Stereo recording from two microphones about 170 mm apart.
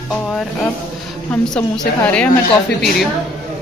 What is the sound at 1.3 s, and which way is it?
Speech, 5° left (ahead or behind).